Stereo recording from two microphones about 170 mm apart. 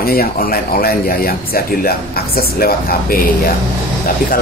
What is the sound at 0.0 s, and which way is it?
Speech, 60° left (ahead or behind).